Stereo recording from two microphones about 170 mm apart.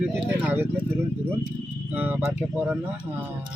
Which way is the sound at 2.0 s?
10° right (ahead or behind).